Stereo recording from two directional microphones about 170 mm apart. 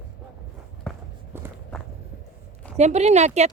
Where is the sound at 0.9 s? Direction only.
5° left (ahead or behind).